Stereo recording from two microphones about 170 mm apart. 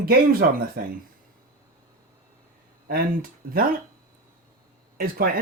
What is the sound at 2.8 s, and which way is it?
Speech, 60° right (ahead or behind).